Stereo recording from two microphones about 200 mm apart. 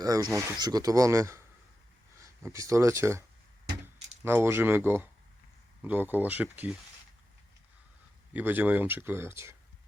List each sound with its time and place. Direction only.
0.0 s speech: 15° right (ahead or behind)
8.3 s speech: 10° right (ahead or behind)